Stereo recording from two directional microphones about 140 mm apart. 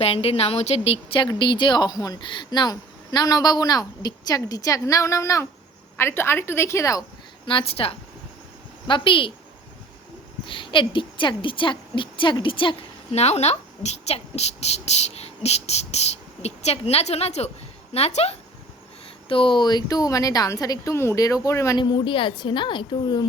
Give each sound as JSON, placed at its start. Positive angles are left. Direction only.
{"t": 0.0, "sound": "a woman's voice", "side_deg": 45}
{"t": 7.4, "sound": "a woman's voice", "side_deg": 40}
{"t": 10.4, "sound": "a woman's voice", "side_deg": 35}
{"t": 13.1, "sound": "speech", "side_deg": 50}
{"t": 19.3, "sound": "a woman's voice", "side_deg": 35}
{"t": 21.8, "sound": "a woman's voice", "side_deg": 35}